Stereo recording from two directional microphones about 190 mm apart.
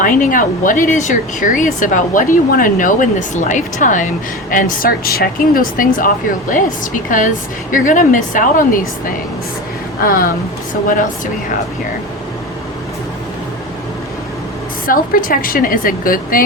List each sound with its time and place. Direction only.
0.0 s speech: 45° left (ahead or behind)
14.8 s speech: 45° left (ahead or behind)